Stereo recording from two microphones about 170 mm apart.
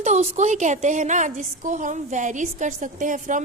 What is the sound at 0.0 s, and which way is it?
A woman's voice, 40° right (ahead or behind).